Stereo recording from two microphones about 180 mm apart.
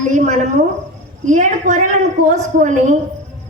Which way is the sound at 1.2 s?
45° right (ahead or behind).